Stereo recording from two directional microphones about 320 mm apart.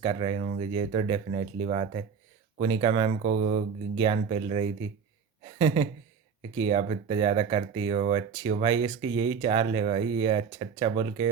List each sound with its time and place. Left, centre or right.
0.0 s speech: centre